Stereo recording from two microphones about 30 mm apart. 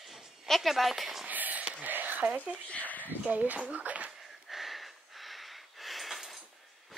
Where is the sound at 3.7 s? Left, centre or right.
Right.